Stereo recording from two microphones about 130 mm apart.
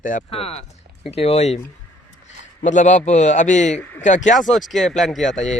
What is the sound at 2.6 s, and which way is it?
A man's voice, 70° left (ahead or behind).